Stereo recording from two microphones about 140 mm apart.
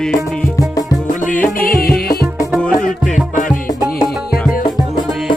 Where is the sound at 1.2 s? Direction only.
70° left (ahead or behind); by 1.9 s 90° left.